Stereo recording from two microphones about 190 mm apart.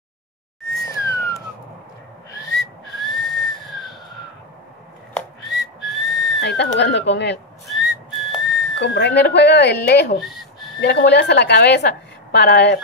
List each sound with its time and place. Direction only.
0.8 s whistling: 15° left (ahead or behind)
3.1 s whistle: centre (ahead or behind)
5.1 s whistling: centre (ahead or behind)
6.4 s a woman's voice: 65° left (ahead or behind)
7.6 s whistling: centre (ahead or behind)
8.7 s a woman's voice: 65° left (ahead or behind)
10.2 s a sound: centre (ahead or behind)
10.8 s a woman's voice: 65° left (ahead or behind)